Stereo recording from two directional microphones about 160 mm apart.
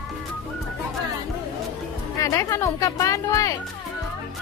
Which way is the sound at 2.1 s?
20° left (ahead or behind).